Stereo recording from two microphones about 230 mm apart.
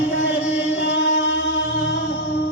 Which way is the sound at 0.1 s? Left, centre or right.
Left.